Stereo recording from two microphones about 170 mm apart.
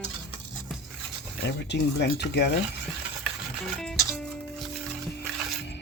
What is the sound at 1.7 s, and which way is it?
Speech, 80° left.